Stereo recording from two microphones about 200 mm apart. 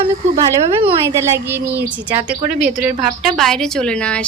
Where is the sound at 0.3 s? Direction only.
15° right (ahead or behind).